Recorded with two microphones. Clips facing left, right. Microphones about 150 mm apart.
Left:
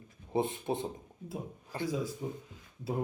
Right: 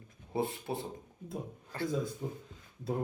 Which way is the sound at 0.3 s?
20° left (ahead or behind).